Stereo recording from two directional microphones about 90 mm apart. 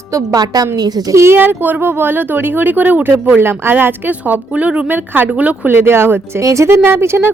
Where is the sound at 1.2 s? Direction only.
25° right (ahead or behind).